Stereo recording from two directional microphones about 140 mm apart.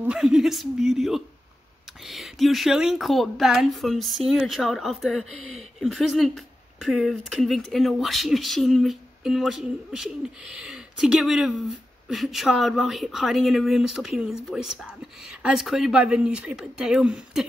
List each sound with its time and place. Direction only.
0.0 s speech: 5° right (ahead or behind)